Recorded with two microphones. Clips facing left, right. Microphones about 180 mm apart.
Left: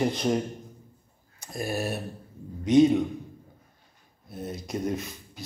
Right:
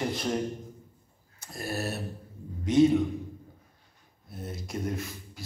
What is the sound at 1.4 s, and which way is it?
A man's voice, 15° left (ahead or behind).